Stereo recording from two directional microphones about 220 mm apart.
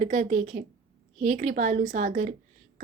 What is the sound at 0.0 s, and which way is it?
Child singing, 35° right (ahead or behind).